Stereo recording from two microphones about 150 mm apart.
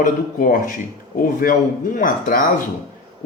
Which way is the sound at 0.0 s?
65° left (ahead or behind).